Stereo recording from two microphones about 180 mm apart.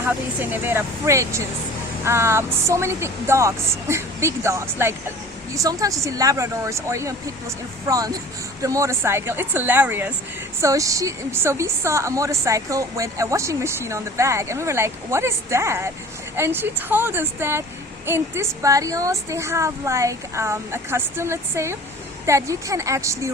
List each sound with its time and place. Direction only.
0.0 s a woman's voice: 10° right (ahead or behind)